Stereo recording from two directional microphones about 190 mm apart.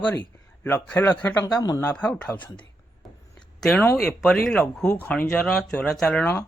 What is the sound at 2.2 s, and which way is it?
Speech, 10° left (ahead or behind).